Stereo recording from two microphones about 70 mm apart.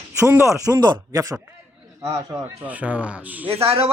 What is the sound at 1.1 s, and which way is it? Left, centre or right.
Speech, right.